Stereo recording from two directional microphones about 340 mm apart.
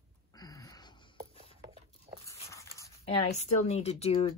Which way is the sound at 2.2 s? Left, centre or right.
Centre.